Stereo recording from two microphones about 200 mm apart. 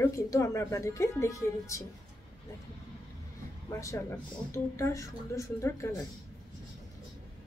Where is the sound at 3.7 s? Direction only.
15° left (ahead or behind).